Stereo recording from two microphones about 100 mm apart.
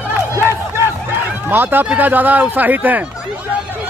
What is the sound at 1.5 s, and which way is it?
Speech, 20° right (ahead or behind).